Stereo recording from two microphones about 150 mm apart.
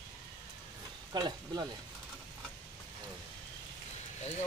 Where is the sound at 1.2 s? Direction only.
30° right (ahead or behind).